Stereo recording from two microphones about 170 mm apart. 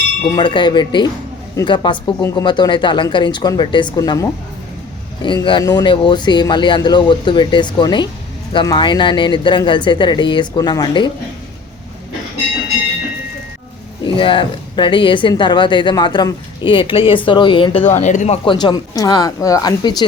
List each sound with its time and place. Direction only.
0.3 s speech: 25° left (ahead or behind)
14.0 s speech: 30° left (ahead or behind)
17.9 s speech: 45° left (ahead or behind)
18.4 s speech: 25° left (ahead or behind)